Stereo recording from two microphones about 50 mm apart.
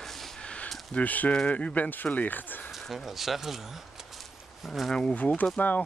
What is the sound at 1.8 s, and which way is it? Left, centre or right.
Speech, left.